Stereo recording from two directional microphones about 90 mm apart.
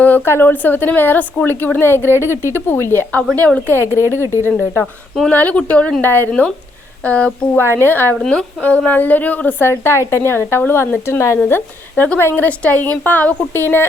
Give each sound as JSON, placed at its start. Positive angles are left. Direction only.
{"t": 0.0, "sound": "a woman's voice", "side_deg": 20}
{"t": 4.0, "sound": "speech", "side_deg": -30}
{"t": 5.3, "sound": "a woman's voice", "side_deg": 15}
{"t": 8.2, "sound": "a woman's voice", "side_deg": 10}